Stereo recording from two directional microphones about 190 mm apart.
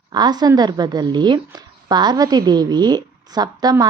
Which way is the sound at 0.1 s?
20° right (ahead or behind).